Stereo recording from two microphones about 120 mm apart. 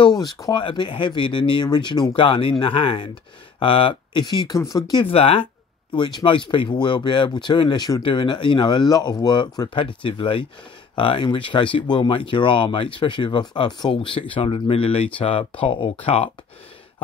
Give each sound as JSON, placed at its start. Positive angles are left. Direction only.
{"t": 0.2, "sound": "speech", "side_deg": 35}
{"t": 5.0, "sound": "speech", "side_deg": 50}
{"t": 5.9, "sound": "speech", "side_deg": 40}